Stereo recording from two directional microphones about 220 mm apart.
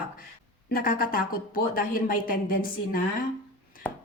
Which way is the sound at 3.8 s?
5° left (ahead or behind).